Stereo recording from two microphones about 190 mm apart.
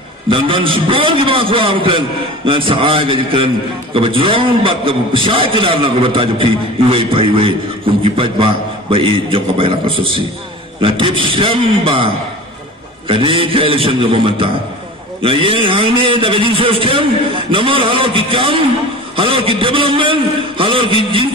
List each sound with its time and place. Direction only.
0.3 s a man's voice: 25° right (ahead or behind)
13.1 s a man's voice: 30° right (ahead or behind)